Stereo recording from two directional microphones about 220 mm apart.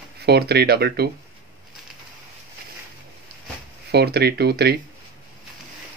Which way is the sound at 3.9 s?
45° right (ahead or behind).